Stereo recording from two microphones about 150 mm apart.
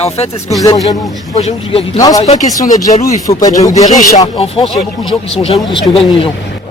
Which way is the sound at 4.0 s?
60° left (ahead or behind).